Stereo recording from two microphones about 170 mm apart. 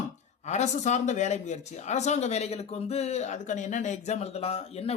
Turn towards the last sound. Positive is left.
turn(degrees=35)  # may be behind; listen again after turning